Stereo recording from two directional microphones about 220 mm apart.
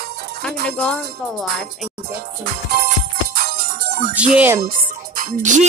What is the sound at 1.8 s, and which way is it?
Music, 45° right (ahead or behind).